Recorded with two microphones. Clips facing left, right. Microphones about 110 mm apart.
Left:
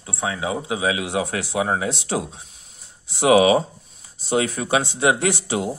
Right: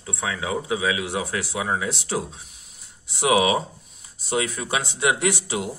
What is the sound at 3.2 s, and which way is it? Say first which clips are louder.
Speech: left 5 dB; 35° left (ahead or behind).